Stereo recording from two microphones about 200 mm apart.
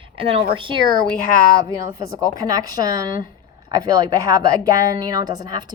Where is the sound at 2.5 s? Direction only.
20° right (ahead or behind).